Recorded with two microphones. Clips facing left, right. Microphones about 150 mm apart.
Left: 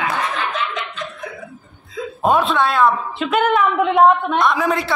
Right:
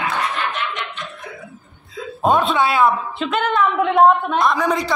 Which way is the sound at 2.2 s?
Centre (ahead or behind).